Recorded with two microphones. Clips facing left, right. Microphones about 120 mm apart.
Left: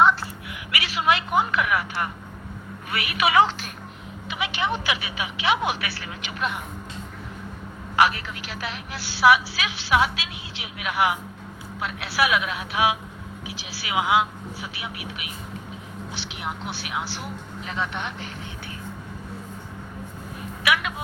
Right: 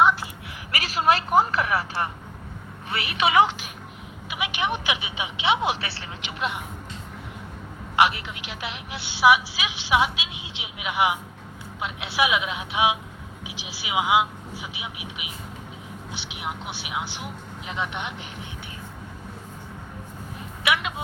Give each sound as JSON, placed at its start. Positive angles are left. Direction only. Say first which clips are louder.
{"t": 0.0, "sound": "a sound", "louder": "left 1 dB", "side_deg": -10}
{"t": 0.7, "sound": "a woman's voice", "louder": "right 1 dB", "side_deg": -40}
{"t": 7.9, "sound": "a woman's voice", "louder": "even", "side_deg": -25}
{"t": 20.7, "sound": "vehicle", "louder": "left 1 dB", "side_deg": -25}